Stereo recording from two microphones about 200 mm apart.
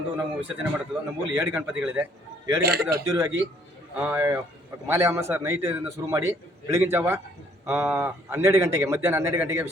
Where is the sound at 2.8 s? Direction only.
10° right (ahead or behind).